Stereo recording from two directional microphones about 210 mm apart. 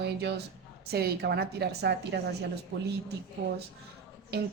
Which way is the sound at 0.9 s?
50° right (ahead or behind).